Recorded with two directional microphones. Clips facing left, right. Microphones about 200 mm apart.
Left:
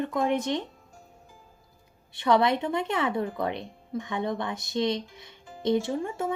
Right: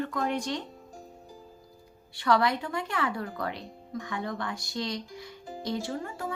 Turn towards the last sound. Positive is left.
turn(degrees=20)  # may be behind; listen again after turning